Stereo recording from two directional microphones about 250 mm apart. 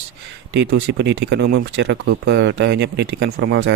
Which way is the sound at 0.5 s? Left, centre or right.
Right.